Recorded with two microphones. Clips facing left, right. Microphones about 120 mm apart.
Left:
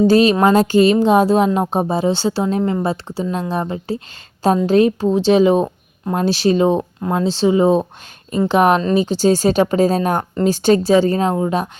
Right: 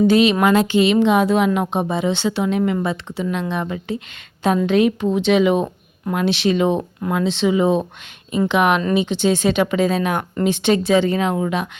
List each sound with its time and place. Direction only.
0.1 s speech: 40° left (ahead or behind)